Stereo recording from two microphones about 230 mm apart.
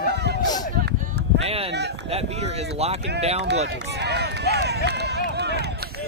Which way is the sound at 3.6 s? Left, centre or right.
Right.